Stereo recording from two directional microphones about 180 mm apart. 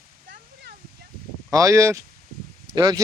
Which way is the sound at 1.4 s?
15° right (ahead or behind).